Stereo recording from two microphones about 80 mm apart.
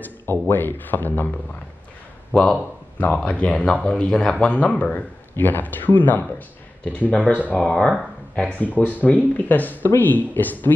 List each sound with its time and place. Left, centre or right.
0.0 s speech: left
2.3 s speech: centre
3.0 s speech: centre